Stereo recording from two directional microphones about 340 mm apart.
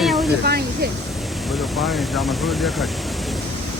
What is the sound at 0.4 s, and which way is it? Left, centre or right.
Speech, right.